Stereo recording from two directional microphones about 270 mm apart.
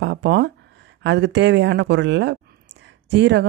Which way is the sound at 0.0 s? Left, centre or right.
Right.